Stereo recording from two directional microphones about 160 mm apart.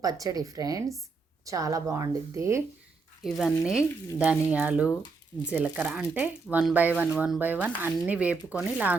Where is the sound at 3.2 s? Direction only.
Centre (ahead or behind).